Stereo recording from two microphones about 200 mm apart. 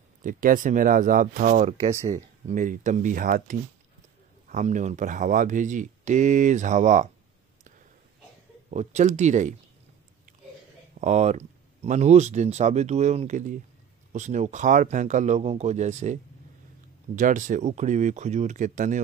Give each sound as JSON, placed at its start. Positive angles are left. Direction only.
{"t": 0.2, "sound": "speech", "side_deg": -45}
{"t": 8.6, "sound": "speech", "side_deg": -35}
{"t": 11.0, "sound": "speech", "side_deg": -35}